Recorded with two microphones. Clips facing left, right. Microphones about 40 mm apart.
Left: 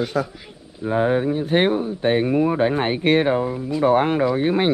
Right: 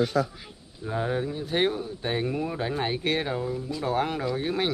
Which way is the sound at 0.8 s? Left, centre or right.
Left.